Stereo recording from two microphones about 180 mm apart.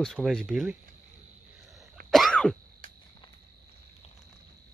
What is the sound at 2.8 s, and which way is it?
Cricket, 45° right (ahead or behind).